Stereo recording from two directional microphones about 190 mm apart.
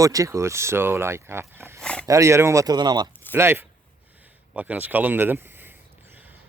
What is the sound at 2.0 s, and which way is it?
Speech, 15° right (ahead or behind).